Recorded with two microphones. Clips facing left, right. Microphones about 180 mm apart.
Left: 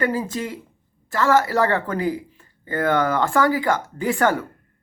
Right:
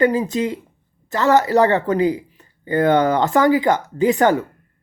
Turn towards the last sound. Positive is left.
turn(degrees=-20)  # may be behind; listen again after turning